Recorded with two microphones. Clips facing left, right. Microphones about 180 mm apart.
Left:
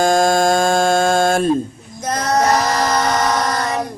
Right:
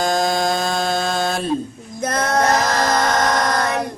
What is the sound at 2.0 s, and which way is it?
Male singing, 55° right (ahead or behind).